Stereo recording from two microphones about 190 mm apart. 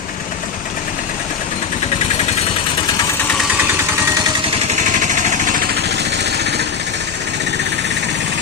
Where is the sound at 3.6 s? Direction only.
10° right (ahead or behind).